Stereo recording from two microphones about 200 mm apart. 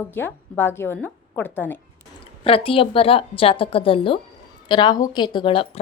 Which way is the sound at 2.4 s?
25° left (ahead or behind).